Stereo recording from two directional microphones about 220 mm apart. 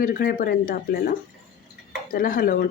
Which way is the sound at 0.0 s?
40° left (ahead or behind).